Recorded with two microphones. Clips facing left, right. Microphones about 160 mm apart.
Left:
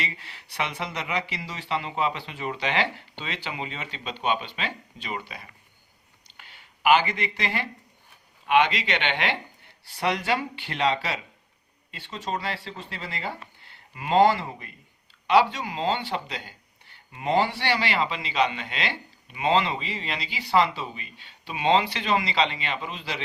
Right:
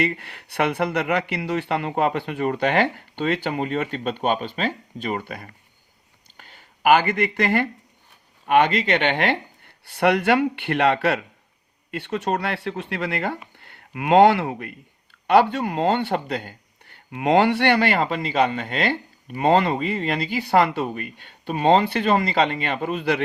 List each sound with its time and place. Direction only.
0.0 s speech: 55° right (ahead or behind)